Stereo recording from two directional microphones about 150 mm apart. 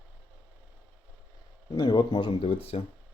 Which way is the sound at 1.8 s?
30° left (ahead or behind).